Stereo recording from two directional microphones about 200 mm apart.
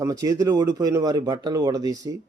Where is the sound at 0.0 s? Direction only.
15° right (ahead or behind).